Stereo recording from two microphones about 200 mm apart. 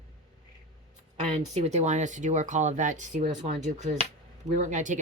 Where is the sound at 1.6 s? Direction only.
35° right (ahead or behind).